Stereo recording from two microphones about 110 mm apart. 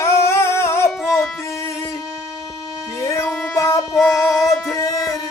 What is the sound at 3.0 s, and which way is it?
Music, 25° left (ahead or behind).